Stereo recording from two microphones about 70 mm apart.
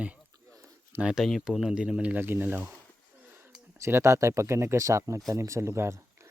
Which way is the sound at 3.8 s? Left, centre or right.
Right.